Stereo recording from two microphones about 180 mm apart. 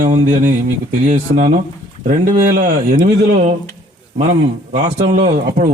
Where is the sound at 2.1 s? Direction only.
55° right (ahead or behind).